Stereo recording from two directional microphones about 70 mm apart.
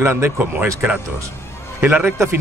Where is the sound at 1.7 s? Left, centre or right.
Right.